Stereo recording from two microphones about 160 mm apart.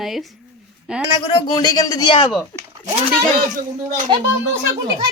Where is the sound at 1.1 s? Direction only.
30° left (ahead or behind).